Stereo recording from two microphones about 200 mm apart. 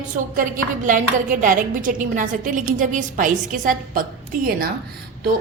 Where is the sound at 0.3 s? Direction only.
40° right (ahead or behind).